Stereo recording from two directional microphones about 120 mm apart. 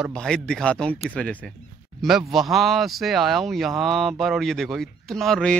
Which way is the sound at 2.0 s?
Centre (ahead or behind).